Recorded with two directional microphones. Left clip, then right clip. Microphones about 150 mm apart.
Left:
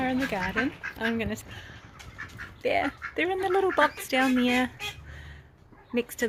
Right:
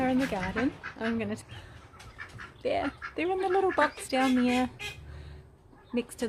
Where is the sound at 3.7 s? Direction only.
35° left (ahead or behind).